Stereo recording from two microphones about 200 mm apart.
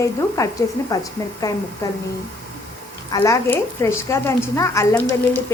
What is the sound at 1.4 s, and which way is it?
Speech, 20° left (ahead or behind).